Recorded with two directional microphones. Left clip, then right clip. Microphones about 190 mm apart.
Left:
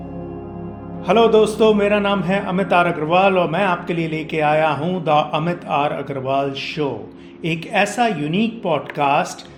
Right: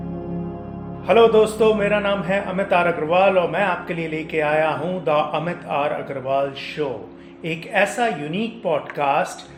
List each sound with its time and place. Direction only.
1.0 s a man's voice: 30° left (ahead or behind)